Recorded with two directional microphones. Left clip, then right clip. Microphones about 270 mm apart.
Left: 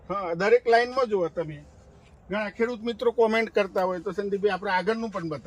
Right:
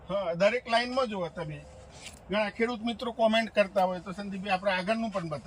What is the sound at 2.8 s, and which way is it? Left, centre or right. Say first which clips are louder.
Speech: left 6 dB; centre.